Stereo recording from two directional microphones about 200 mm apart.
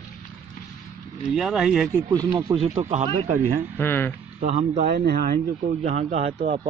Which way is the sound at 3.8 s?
10° left (ahead or behind).